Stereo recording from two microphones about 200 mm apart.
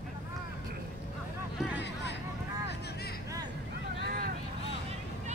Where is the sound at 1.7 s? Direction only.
60° left (ahead or behind).